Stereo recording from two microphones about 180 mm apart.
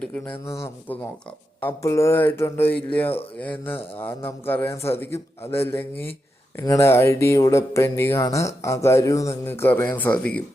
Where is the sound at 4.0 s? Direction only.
10° left (ahead or behind).